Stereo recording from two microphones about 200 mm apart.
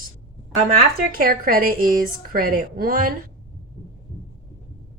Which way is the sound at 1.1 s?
45° right (ahead or behind).